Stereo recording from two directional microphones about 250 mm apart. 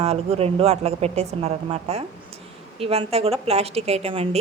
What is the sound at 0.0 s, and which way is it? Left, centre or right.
A woman's voice, right.